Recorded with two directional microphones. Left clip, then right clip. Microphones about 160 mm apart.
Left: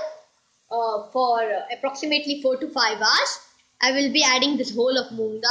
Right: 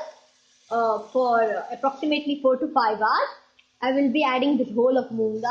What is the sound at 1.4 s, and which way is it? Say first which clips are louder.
A woman's voice: right 1 dB; 50° right (ahead or behind).